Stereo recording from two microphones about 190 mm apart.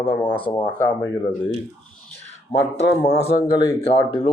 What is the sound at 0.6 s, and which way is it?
Speech, 10° left (ahead or behind).